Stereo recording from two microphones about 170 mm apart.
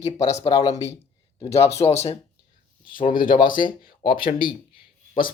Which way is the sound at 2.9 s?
55° left (ahead or behind).